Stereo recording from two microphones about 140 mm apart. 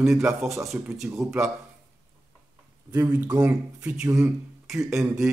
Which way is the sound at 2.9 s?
15° right (ahead or behind).